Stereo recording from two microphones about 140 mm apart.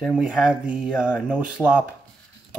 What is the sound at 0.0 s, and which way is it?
Speech, 5° right (ahead or behind).